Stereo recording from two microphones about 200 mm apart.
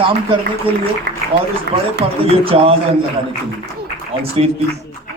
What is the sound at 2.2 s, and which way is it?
Speech, 30° right (ahead or behind).